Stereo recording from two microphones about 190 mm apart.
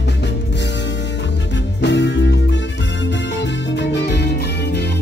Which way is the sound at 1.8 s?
65° left (ahead or behind).